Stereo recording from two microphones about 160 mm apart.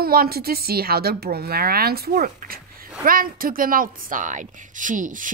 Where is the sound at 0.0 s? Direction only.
70° right (ahead or behind).